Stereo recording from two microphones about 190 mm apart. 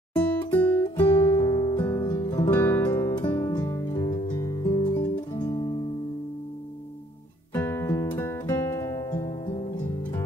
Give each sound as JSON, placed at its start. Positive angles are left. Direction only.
{"t": 0.5, "sound": "music", "side_deg": 10}
{"t": 1.0, "sound": "music", "side_deg": 25}
{"t": 2.5, "sound": "music", "side_deg": 10}
{"t": 5.3, "sound": "guitar", "side_deg": 20}
{"t": 7.5, "sound": "music", "side_deg": 15}